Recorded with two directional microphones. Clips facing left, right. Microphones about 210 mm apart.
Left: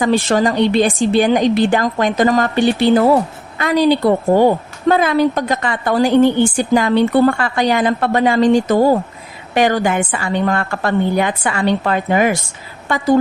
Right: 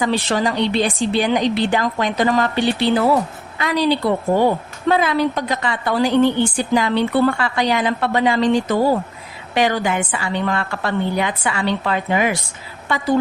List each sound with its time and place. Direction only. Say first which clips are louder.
0.0 s a woman's voice: left 5 dB; 45° left (ahead or behind)